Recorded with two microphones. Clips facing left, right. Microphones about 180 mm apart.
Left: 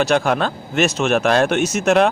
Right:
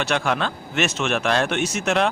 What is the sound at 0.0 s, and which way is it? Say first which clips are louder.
A man's voice: left 6 dB; 40° left (ahead or behind).